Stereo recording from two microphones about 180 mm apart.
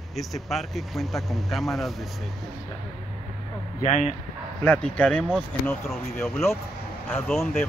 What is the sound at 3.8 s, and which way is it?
Speech, 40° left (ahead or behind).